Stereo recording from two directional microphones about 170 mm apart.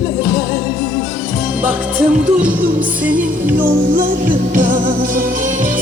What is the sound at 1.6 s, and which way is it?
Music, 10° right (ahead or behind).